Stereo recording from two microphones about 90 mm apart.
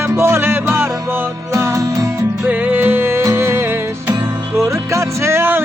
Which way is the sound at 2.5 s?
20° right (ahead or behind).